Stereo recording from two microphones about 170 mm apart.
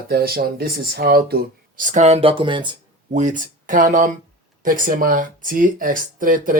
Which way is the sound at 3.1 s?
45° right (ahead or behind).